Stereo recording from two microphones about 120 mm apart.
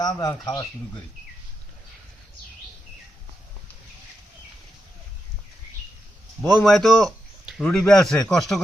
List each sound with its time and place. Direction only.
0.0 s speech: 35° left (ahead or behind)
6.4 s a man's voice: centre (ahead or behind)